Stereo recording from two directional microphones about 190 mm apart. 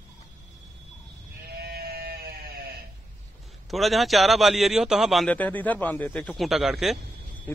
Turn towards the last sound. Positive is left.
turn(degrees=0)  # may be behind; listen again after turning